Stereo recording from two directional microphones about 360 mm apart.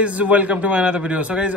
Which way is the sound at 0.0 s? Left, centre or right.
Centre.